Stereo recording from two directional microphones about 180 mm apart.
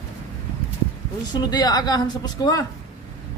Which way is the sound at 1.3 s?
25° left (ahead or behind).